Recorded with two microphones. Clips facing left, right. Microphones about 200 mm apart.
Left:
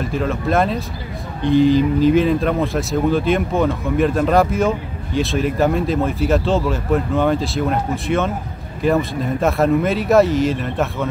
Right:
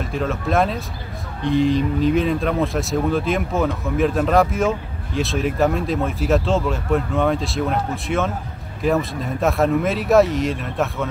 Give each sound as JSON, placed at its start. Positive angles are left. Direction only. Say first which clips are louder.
{"t": 0.0, "sound": "speech", "louder": "left 3 dB", "side_deg": 0}